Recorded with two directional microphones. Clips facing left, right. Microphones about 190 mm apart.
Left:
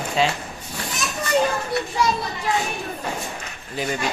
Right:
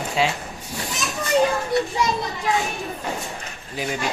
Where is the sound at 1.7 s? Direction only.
20° right (ahead or behind).